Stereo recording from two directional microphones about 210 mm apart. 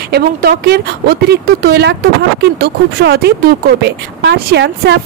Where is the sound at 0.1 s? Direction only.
50° right (ahead or behind).